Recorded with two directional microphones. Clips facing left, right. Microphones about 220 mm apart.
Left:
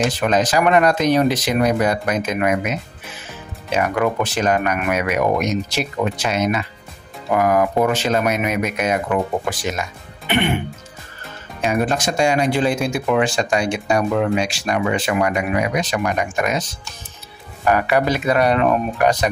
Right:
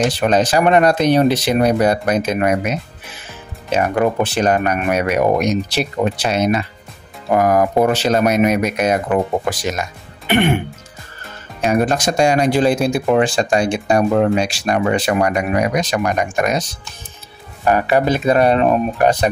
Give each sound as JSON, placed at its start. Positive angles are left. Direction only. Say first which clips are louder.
{"t": 0.2, "sound": "speech", "louder": "right 3 dB", "side_deg": -30}
{"t": 11.6, "sound": "speech", "louder": "right 3 dB", "side_deg": -40}
{"t": 17.6, "sound": "speech", "louder": "right 2 dB", "side_deg": -30}